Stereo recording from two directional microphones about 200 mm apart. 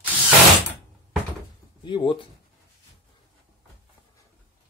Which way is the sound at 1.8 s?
25° left (ahead or behind).